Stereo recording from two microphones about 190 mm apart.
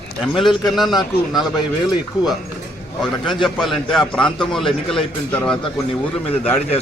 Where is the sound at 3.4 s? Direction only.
Centre (ahead or behind).